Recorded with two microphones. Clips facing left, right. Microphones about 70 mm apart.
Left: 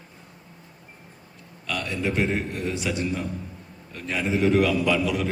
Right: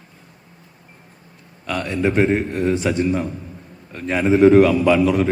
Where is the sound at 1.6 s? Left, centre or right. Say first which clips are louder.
Right 7 dB; right.